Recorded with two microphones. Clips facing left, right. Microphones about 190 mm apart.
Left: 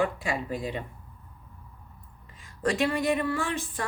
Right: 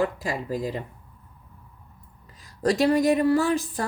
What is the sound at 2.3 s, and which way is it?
Speech, 40° right (ahead or behind).